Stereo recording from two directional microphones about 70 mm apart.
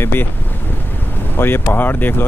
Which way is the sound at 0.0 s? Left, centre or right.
Left.